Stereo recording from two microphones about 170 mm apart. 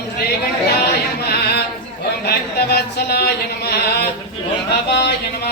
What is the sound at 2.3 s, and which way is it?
Speech, 70° left (ahead or behind).